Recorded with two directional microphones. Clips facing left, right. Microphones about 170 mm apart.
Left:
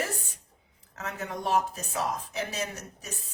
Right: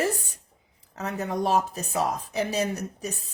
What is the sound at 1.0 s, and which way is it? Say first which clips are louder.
Speech: right 7 dB; 35° right (ahead or behind).